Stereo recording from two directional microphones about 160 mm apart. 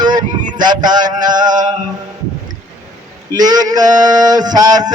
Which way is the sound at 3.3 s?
25° right (ahead or behind).